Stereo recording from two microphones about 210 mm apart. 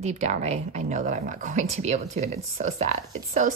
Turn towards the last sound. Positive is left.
turn(degrees=-35)  # may be behind; listen again after turning